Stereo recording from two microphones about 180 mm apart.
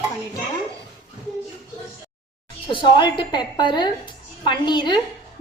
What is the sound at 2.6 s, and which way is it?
A woman's voice, 25° left (ahead or behind).